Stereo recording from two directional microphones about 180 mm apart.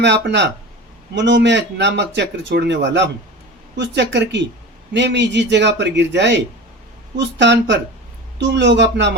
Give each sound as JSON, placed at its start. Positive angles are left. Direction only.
{"t": 0.0, "sound": "a man's voice", "side_deg": -75}